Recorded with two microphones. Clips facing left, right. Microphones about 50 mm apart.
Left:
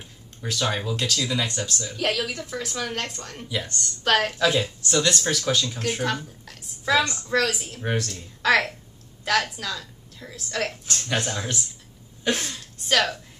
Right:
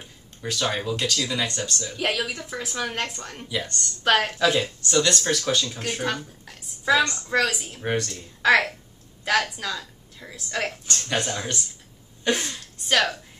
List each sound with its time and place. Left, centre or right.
0.4 s speech: centre
2.0 s speech: centre
3.4 s speech: centre
4.0 s speech: centre
6.4 s a sound: centre
7.0 s speech: centre
7.2 s a woman's voice: centre
10.9 s a woman's voice: centre